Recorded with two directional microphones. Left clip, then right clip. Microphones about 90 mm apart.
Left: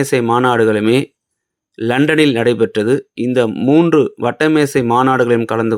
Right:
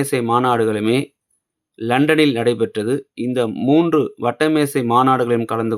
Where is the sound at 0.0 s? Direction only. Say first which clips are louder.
Left 4 dB; 35° left (ahead or behind).